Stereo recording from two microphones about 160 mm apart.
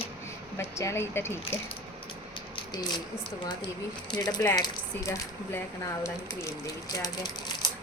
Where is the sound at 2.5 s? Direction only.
25° left (ahead or behind).